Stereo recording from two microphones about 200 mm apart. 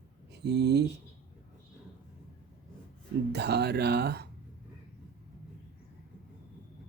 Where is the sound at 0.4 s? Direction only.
60° right (ahead or behind).